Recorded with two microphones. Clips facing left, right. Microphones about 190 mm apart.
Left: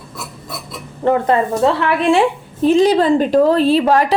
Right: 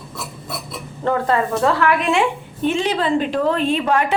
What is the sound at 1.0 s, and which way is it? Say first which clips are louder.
A woman's voice: left 4 dB; 20° left (ahead or behind).